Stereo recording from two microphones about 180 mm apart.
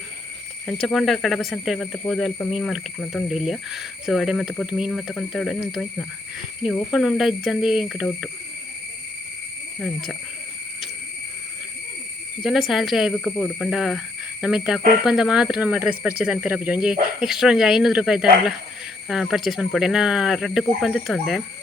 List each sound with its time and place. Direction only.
0.7 s speech: centre (ahead or behind)
12.5 s speech: centre (ahead or behind)